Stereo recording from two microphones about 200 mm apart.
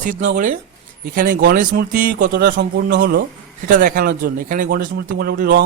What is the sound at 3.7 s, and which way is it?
Speech, 45° right (ahead or behind).